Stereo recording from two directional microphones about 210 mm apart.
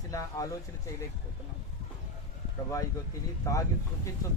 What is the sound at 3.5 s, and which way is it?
Speech, 15° left (ahead or behind).